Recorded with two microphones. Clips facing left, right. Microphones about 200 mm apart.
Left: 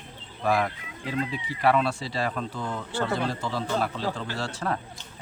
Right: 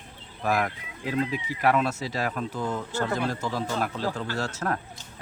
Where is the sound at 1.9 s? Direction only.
45° right (ahead or behind).